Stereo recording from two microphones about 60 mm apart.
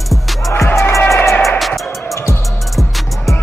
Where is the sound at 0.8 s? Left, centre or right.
Left.